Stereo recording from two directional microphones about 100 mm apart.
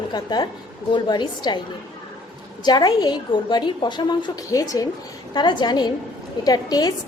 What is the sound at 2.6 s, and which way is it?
A woman's voice, 45° left (ahead or behind).